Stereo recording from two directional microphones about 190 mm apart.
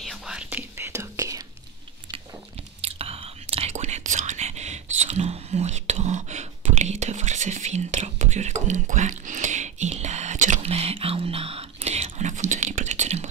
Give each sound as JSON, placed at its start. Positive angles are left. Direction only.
{"t": 0.0, "sound": "whispering", "side_deg": 0}
{"t": 2.8, "sound": "whispering", "side_deg": -30}